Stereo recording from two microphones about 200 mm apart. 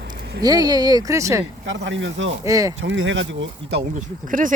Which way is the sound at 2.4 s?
15° right (ahead or behind).